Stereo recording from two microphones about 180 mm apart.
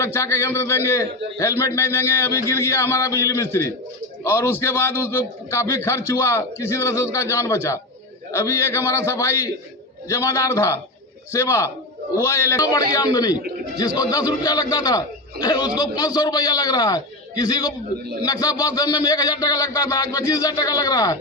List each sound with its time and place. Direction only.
0.0 s a man's voice: 15° left (ahead or behind)
12.9 s music: 20° left (ahead or behind)